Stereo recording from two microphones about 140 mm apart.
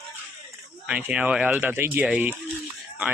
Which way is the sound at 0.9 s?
10° right (ahead or behind).